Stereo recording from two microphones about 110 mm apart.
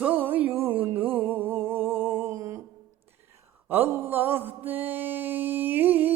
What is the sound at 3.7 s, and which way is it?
Mantra, 20° right (ahead or behind).